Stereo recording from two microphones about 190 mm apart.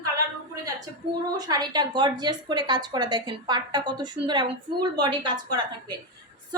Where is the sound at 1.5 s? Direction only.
20° right (ahead or behind).